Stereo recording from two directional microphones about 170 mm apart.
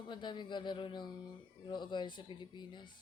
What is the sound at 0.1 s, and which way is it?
Speech, 25° left (ahead or behind).